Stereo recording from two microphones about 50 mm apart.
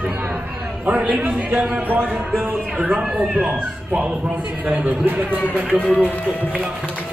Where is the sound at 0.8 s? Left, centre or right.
Right.